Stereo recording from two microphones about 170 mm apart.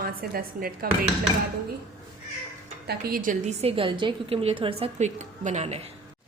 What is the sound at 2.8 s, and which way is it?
Speech, 65° right (ahead or behind).